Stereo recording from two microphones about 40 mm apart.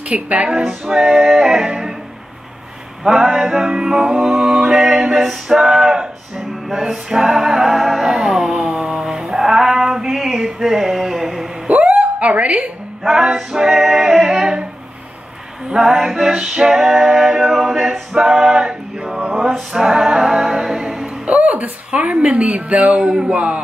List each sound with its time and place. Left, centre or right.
0.0 s speech: right
0.5 s music: centre
3.0 s music: centre
11.7 s a sound: right
13.0 s music: centre
15.7 s music: centre
19.3 s a capella: centre
21.3 s speech: right